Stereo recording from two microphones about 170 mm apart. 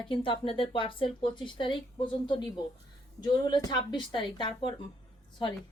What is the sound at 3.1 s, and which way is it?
Speech, 25° left (ahead or behind).